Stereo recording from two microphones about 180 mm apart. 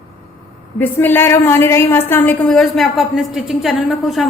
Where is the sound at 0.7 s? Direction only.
10° left (ahead or behind).